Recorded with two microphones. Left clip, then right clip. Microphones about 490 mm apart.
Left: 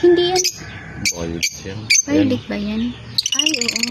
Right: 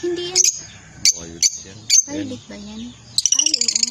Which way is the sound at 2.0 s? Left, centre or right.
Right.